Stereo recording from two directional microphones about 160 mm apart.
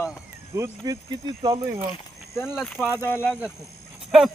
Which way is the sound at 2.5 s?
Centre (ahead or behind).